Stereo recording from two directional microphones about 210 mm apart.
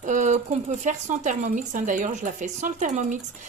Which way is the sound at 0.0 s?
35° right (ahead or behind).